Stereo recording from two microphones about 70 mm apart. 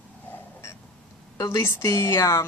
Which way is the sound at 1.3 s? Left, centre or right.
Left.